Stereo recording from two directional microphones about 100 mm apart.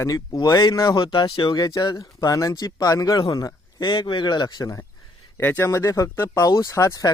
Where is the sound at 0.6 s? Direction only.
45° left (ahead or behind).